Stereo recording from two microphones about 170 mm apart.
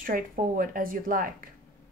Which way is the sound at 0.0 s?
55° right (ahead or behind).